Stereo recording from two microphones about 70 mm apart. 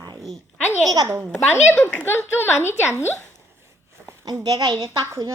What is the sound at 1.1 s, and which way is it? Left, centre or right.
Speech, right.